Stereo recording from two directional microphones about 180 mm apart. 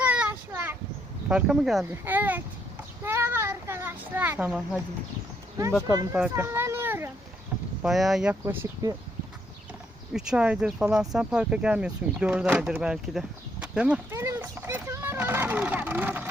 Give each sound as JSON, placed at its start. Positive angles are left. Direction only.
{"t": 0.0, "sound": "child singing", "side_deg": -10}
{"t": 1.3, "sound": "speech", "side_deg": -5}
{"t": 5.9, "sound": "speech", "side_deg": -15}
{"t": 7.8, "sound": "speech", "side_deg": 0}
{"t": 10.1, "sound": "speech", "side_deg": -5}
{"t": 11.1, "sound": "a sound", "side_deg": -5}